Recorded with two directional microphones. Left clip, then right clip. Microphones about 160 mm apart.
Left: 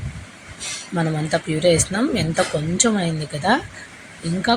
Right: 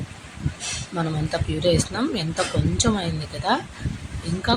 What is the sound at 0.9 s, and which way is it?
Speech, 15° left (ahead or behind).